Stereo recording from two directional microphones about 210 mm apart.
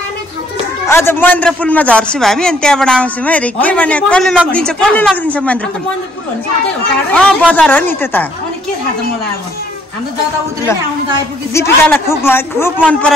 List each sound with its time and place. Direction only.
0.8 s a man's voice: 10° left (ahead or behind)
7.1 s a man's voice: 5° left (ahead or behind)
11.5 s a man's voice: 10° left (ahead or behind)